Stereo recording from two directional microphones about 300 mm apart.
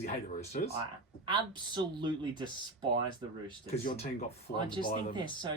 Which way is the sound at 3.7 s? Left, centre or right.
Left.